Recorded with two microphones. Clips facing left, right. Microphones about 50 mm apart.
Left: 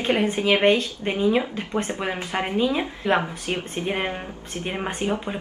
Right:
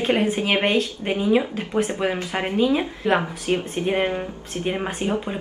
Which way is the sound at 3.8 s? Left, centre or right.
Centre.